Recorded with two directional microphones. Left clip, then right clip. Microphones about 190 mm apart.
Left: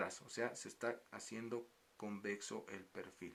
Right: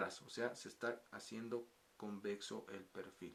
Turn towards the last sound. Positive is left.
turn(degrees=30)  # may be behind; listen again after turning